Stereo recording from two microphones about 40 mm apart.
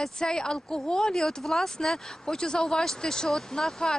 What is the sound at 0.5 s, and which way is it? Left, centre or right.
Speech, centre.